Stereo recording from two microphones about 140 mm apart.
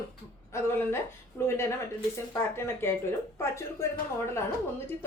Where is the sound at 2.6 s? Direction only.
15° left (ahead or behind).